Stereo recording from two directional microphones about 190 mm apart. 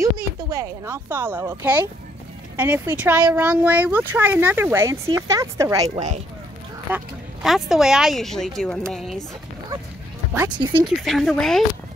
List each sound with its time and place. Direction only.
0.0 s speech: 15° right (ahead or behind)
5.9 s speech: 35° right (ahead or behind)
7.4 s speech: centre (ahead or behind)
10.8 s speech: centre (ahead or behind)